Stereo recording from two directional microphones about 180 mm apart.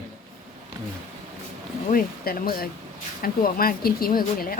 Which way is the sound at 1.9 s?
55° left (ahead or behind).